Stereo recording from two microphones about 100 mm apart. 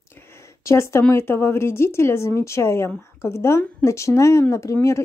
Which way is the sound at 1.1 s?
25° left (ahead or behind).